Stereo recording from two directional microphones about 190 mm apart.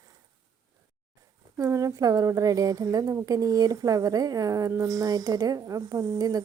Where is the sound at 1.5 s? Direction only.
15° right (ahead or behind).